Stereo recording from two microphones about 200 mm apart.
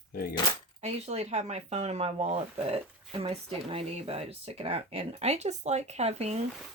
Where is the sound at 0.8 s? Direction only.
30° right (ahead or behind).